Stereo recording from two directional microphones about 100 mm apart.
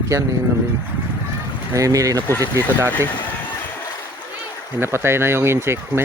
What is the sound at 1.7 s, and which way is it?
Speech, 35° right (ahead or behind).